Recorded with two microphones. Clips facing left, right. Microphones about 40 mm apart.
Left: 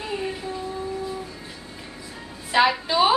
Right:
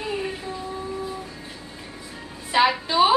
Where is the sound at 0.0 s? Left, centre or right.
Centre.